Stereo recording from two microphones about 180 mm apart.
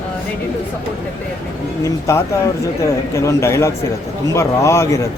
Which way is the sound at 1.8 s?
15° left (ahead or behind).